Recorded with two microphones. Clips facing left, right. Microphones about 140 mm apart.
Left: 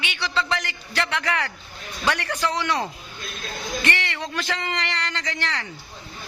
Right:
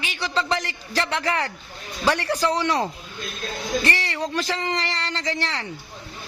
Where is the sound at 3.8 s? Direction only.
35° right (ahead or behind).